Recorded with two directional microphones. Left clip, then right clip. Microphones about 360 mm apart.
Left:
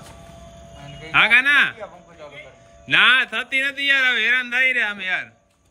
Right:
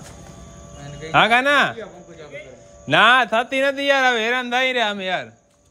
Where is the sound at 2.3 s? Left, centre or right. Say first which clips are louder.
Right 4 dB; right.